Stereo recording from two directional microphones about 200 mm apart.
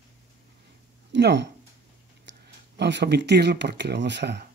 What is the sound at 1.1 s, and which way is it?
Speech, 60° right (ahead or behind).